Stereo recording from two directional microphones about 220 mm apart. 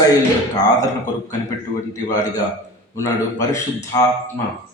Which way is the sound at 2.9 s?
15° left (ahead or behind).